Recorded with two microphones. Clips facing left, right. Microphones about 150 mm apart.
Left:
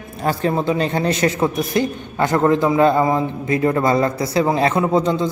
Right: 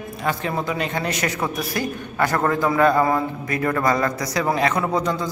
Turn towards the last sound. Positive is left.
turn(degrees=25)  # may be behind; listen again after turning